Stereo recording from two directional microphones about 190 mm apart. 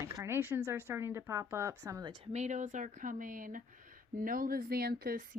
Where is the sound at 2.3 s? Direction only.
35° right (ahead or behind).